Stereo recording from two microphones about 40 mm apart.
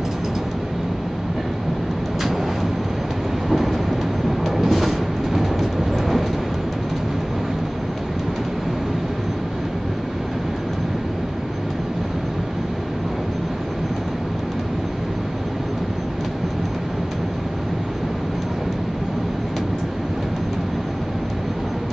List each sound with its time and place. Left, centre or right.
3.4 s train: centre
4.5 s vehicle: centre